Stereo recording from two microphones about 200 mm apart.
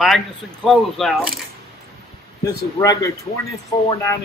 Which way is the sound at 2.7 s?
15° left (ahead or behind).